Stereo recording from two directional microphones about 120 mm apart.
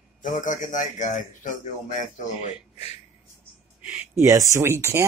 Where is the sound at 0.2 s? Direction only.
90° left.